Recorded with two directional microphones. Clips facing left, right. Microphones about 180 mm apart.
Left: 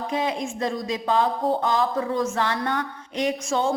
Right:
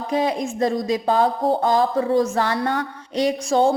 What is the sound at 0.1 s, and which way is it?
A woman's voice, 40° right (ahead or behind).